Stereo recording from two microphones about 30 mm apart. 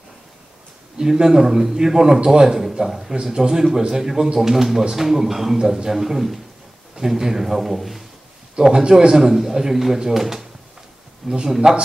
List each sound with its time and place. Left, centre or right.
0.9 s speech: centre
8.7 s speech: right
9.1 s speech: centre
11.4 s speech: centre